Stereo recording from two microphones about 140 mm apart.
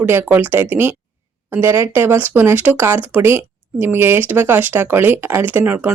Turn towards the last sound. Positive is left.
turn(degrees=-15)  # may be behind; listen again after turning